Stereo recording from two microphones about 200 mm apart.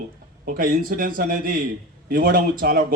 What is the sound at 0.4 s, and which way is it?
A man's voice, 45° right (ahead or behind).